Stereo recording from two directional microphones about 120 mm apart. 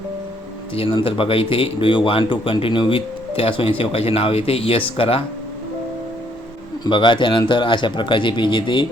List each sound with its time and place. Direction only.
0.8 s speech: 45° left (ahead or behind)
6.8 s speech: 40° left (ahead or behind)